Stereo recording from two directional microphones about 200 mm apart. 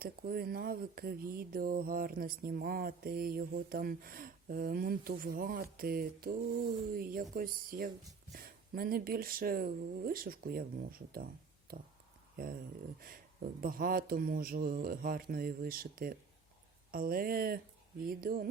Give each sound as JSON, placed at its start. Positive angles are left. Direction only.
{"t": 0.0, "sound": "speech", "side_deg": -50}
{"t": 12.4, "sound": "speech", "side_deg": -45}